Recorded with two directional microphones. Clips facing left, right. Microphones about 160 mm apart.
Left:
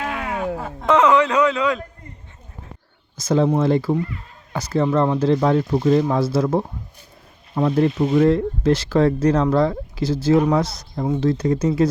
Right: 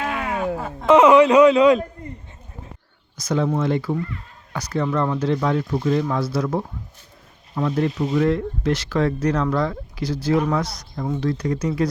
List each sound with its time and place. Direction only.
0.9 s a man's voice: 15° right (ahead or behind)
3.2 s speech: 30° left (ahead or behind)